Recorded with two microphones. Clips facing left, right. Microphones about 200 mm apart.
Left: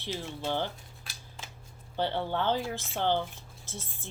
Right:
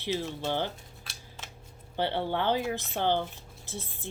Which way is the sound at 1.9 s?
15° right (ahead or behind).